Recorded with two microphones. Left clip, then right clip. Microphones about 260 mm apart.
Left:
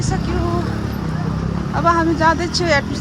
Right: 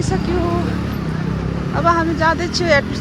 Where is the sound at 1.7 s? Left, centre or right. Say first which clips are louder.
Even; centre.